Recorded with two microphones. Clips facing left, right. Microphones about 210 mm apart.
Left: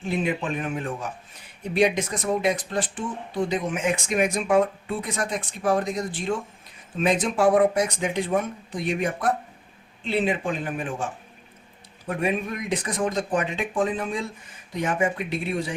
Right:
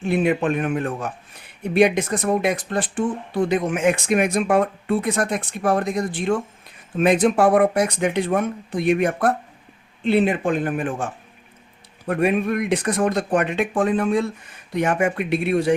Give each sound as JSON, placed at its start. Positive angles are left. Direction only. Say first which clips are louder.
{"t": 0.1, "sound": "speech", "louder": "right 6 dB", "side_deg": -65}